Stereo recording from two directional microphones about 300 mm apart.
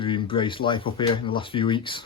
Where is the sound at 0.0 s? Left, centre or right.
Centre.